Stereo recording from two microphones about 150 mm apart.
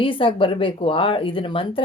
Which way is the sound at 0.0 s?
35° left (ahead or behind).